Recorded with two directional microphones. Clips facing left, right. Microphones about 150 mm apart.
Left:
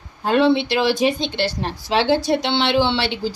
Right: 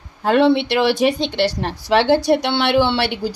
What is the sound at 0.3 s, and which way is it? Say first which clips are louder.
Speech: right 2 dB; 65° right (ahead or behind).